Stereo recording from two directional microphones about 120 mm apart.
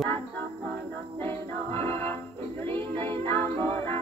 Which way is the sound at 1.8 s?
20° left (ahead or behind).